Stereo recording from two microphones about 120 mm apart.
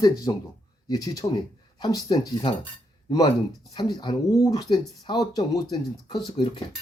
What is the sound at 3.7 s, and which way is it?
Speech, 35° left (ahead or behind).